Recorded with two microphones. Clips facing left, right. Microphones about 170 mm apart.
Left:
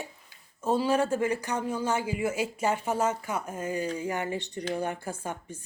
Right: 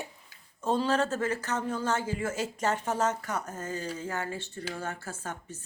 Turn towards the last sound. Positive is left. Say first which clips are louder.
# left 3 dB
turn(degrees=10)  # may be behind; listen again after turning